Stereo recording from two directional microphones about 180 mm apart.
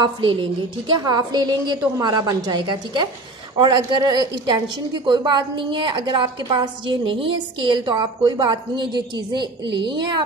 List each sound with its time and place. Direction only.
0.0 s a woman's voice: 30° right (ahead or behind)